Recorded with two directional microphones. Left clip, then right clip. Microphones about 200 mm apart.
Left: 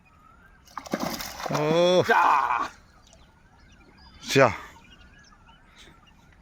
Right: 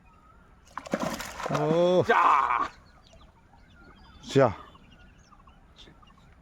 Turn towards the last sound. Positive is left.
turn(degrees=-10)  # may be behind; listen again after turning